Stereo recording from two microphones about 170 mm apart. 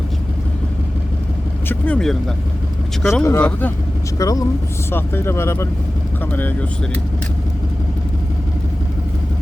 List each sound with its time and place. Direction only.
1.6 s vehicle: 10° left (ahead or behind)
3.1 s speech: 10° left (ahead or behind)
4.2 s speech: 20° left (ahead or behind)